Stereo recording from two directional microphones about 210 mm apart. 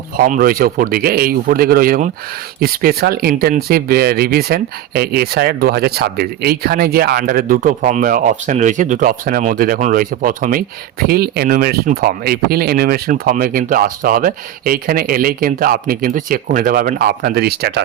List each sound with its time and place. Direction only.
0.2 s speech: 45° right (ahead or behind)